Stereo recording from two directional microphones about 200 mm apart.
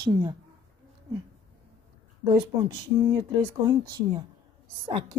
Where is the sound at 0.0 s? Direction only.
20° right (ahead or behind).